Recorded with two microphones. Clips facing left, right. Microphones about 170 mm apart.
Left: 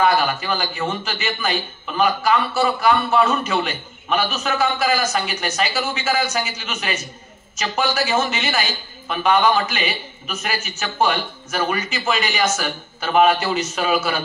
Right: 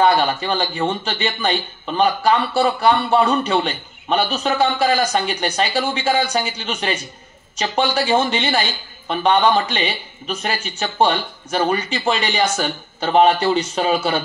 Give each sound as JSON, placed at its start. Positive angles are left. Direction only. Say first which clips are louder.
{"t": 0.0, "sound": "a man's voice", "louder": "right 2 dB", "side_deg": -30}